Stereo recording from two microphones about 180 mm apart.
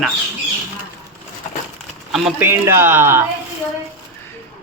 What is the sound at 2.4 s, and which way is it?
Speech, 15° right (ahead or behind).